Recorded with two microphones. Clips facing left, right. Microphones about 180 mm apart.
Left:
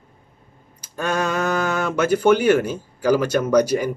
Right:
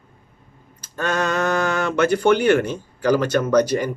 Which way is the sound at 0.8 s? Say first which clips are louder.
Even; 10° left (ahead or behind).